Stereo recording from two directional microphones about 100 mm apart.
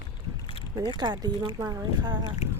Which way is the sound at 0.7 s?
45° right (ahead or behind).